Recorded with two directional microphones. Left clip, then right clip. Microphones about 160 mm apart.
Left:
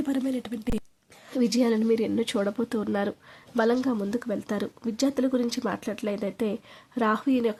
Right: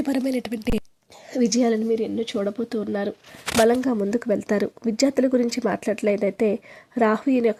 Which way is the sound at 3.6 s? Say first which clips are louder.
Right 5 dB; 25° right (ahead or behind).